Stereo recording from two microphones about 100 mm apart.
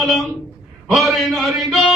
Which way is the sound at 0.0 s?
Centre (ahead or behind).